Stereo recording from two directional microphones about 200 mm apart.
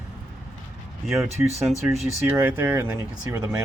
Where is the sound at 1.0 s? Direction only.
Centre (ahead or behind).